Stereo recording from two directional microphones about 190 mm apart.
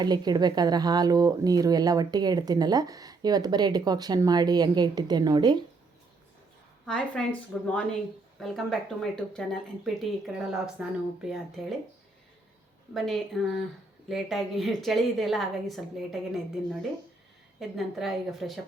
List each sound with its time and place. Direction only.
0.0 s speech: 20° right (ahead or behind)
6.8 s speech: 5° left (ahead or behind)
12.9 s speech: centre (ahead or behind)
17.6 s speech: centre (ahead or behind)